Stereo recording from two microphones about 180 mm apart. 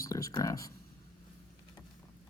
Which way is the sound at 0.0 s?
20° left (ahead or behind).